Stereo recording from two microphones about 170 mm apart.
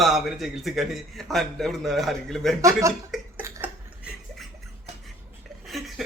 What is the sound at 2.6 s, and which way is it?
Speech, 20° right (ahead or behind).